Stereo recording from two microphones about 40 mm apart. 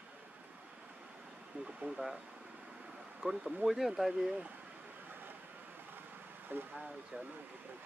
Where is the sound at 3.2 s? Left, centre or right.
Centre.